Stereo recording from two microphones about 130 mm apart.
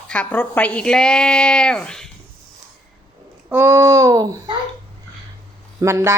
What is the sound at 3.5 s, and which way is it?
A woman's voice, 20° right (ahead or behind).